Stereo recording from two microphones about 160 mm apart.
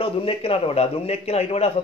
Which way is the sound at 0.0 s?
35° left (ahead or behind).